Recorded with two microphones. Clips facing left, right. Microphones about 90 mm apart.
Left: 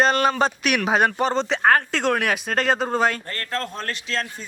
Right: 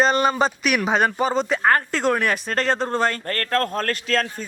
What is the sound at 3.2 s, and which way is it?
A man's voice, 55° right (ahead or behind).